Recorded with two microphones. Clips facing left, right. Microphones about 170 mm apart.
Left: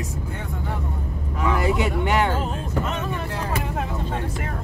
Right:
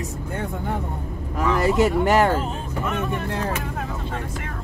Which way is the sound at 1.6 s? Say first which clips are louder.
Right 4 dB; 45° right (ahead or behind).